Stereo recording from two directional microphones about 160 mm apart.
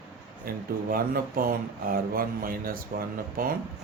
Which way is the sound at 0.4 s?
65° right (ahead or behind).